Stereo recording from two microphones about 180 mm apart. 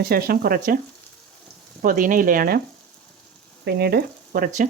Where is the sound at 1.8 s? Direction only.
50° right (ahead or behind).